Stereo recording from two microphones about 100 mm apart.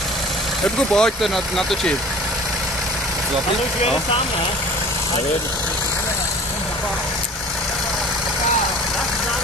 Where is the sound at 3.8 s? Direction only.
65° left (ahead or behind).